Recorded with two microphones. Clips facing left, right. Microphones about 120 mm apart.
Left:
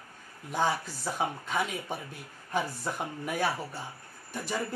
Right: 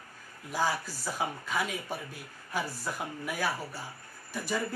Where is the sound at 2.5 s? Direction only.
20° left (ahead or behind).